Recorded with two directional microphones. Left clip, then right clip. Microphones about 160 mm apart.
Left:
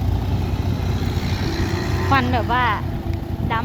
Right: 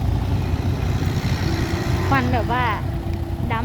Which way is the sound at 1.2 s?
35° right (ahead or behind).